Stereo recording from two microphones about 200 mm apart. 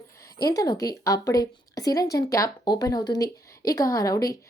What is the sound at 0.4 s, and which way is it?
A woman's voice, 15° left (ahead or behind).